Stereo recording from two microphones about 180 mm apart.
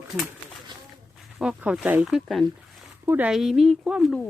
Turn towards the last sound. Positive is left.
turn(degrees=0)  # may be behind; listen again after turning